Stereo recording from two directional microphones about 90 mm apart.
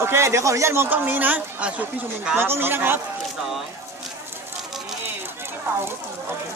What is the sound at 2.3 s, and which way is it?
Speech, 25° right (ahead or behind).